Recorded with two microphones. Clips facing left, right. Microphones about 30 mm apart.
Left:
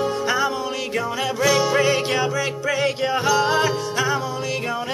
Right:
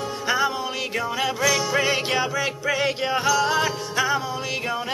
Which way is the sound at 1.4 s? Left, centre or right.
Centre.